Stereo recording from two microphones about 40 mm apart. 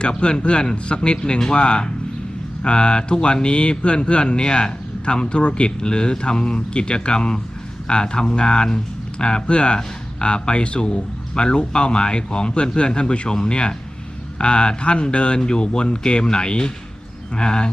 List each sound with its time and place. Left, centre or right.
0.0 s speech: left